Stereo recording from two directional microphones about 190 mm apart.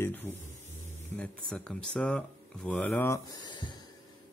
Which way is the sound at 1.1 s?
5° left (ahead or behind).